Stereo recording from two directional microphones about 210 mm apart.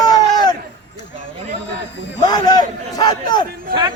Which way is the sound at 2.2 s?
20° left (ahead or behind).